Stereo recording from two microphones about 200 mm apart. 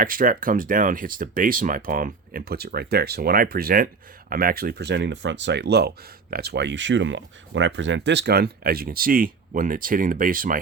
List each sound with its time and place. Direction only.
0.0 s speech: 45° right (ahead or behind)